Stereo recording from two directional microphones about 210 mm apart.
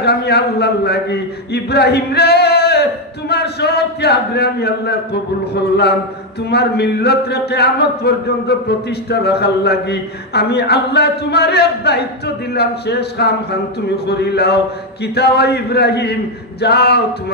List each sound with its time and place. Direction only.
0.0 s a man's voice: 50° left (ahead or behind)